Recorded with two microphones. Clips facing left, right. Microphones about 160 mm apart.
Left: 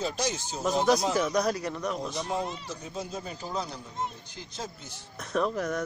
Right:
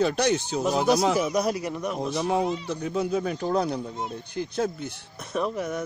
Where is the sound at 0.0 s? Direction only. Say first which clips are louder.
Right 8 dB; 65° right (ahead or behind).